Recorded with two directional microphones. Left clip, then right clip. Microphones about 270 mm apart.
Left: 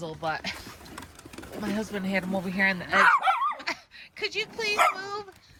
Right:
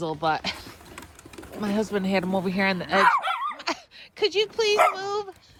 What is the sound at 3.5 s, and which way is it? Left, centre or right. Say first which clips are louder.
Dog: right 3 dB; centre.